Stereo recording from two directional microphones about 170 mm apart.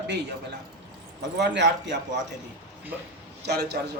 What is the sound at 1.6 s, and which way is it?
Speech, 90° right.